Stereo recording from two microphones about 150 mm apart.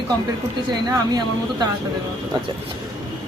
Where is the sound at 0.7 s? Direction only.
25° right (ahead or behind).